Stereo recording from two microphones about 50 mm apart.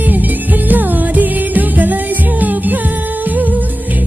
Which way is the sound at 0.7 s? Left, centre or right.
Right.